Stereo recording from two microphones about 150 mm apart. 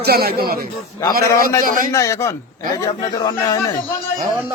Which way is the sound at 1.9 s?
20° left (ahead or behind).